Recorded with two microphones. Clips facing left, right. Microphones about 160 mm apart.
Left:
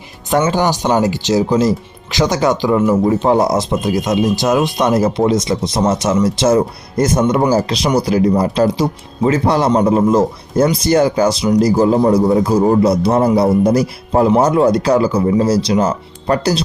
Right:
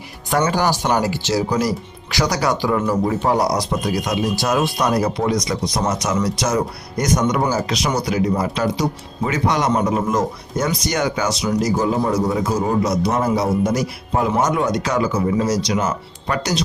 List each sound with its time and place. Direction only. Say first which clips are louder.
0.3 s speech: left 4 dB; 25° left (ahead or behind)